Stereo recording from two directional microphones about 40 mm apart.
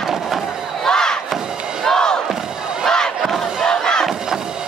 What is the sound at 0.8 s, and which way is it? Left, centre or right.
Crowd, centre.